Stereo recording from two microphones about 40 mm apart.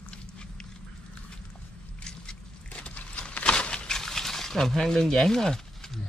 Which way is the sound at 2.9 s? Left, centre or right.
Left.